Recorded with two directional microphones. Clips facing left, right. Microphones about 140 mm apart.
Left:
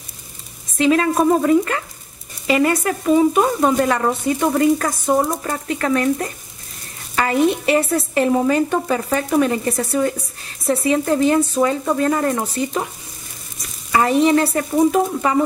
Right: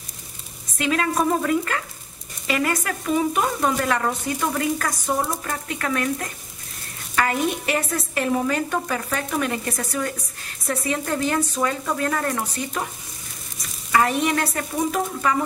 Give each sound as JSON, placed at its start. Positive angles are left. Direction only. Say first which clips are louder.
{"t": 0.7, "sound": "speech", "louder": "left 6 dB", "side_deg": 25}
{"t": 7.2, "sound": "speech", "louder": "left 6 dB", "side_deg": 25}
{"t": 13.9, "sound": "speech", "louder": "left 6 dB", "side_deg": 25}